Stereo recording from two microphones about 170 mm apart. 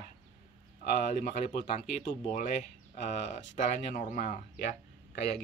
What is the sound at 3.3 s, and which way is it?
Speech, 45° left (ahead or behind).